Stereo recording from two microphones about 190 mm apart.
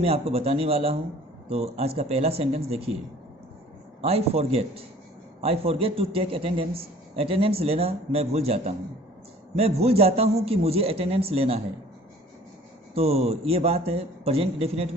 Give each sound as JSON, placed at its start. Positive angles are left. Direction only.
{"t": 0.0, "sound": "a man's voice", "side_deg": -30}
{"t": 4.0, "sound": "a man's voice", "side_deg": -30}
{"t": 12.9, "sound": "a man's voice", "side_deg": -30}